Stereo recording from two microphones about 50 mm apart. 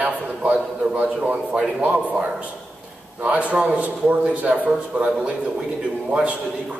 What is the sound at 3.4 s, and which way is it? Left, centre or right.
A man's voice, right.